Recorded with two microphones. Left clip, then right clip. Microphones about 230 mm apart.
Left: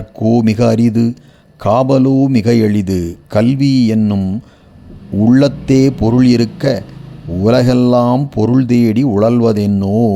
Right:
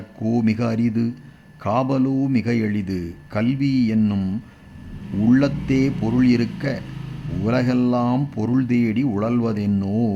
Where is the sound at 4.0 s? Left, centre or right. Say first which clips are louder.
Left 6 dB; centre.